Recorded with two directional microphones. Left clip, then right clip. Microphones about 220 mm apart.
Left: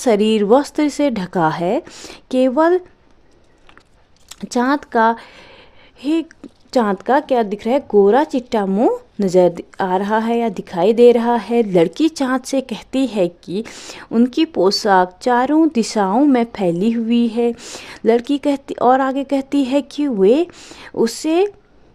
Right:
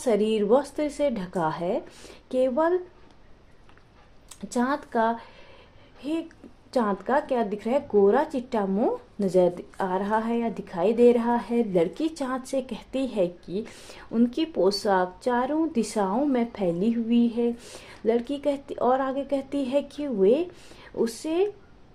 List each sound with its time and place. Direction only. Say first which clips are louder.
0.0 s a woman's voice: left 8 dB; 50° left (ahead or behind)
4.3 s a woman's voice: left 9 dB; 50° left (ahead or behind)